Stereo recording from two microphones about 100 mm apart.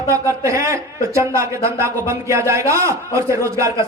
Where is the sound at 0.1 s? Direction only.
30° right (ahead or behind).